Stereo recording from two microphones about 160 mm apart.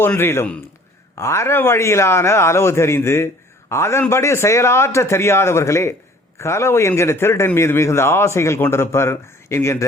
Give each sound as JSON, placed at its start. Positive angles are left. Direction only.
{"t": 0.0, "sound": "a man's voice", "side_deg": 15}